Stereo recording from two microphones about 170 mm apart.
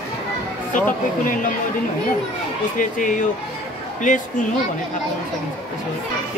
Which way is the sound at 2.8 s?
50° left (ahead or behind).